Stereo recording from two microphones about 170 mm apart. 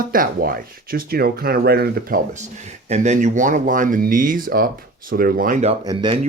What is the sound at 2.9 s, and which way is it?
Speech, 45° right (ahead or behind).